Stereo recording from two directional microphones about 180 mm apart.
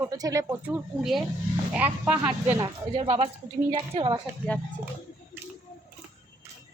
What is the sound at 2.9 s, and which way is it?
A woman's voice, 30° right (ahead or behind).